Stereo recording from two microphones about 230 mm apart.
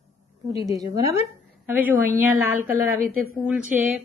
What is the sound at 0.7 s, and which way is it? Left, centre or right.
A woman's voice, centre.